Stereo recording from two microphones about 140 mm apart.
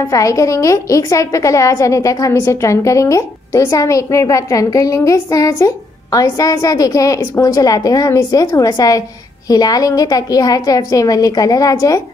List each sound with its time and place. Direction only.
0.1 s a woman's voice: 25° left (ahead or behind)